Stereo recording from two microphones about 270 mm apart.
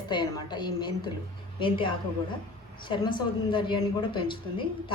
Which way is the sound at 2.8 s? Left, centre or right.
Centre.